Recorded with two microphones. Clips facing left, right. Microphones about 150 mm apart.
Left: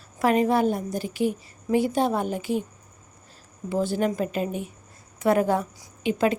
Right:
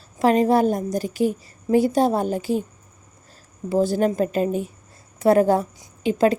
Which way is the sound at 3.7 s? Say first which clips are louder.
Right 5 dB; 40° right (ahead or behind).